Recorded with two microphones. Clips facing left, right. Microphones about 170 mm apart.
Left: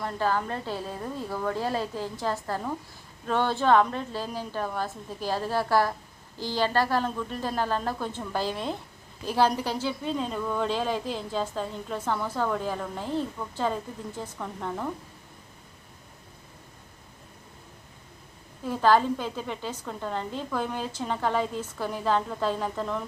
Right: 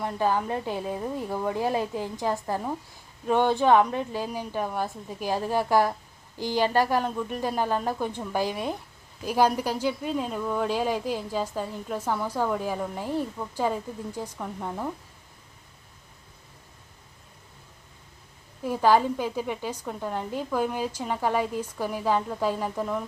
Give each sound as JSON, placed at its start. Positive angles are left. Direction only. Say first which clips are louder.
{"t": 0.0, "sound": "speech", "louder": "right 2 dB", "side_deg": -15}
{"t": 18.6, "sound": "speech", "louder": "right 1 dB", "side_deg": -10}